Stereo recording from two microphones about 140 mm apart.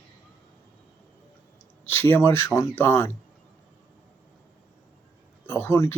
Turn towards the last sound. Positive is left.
turn(degrees=20)  # may be behind; listen again after turning